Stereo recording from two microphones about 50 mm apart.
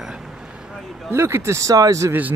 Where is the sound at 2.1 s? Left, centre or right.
Right.